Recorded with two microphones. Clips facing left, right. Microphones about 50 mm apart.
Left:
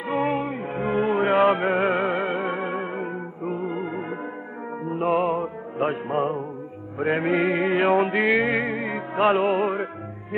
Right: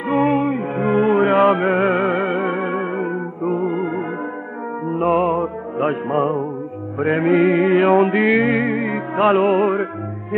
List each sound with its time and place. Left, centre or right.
0.1 s music: centre
7.0 s music: centre